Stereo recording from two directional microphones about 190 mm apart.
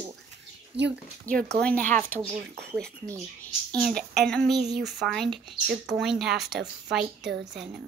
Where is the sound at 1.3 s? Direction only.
5° left (ahead or behind).